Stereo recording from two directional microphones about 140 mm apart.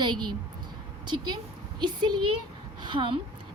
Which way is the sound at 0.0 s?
35° right (ahead or behind).